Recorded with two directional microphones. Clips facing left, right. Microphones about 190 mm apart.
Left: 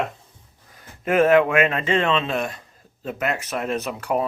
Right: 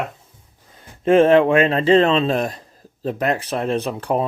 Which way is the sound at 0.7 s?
25° right (ahead or behind).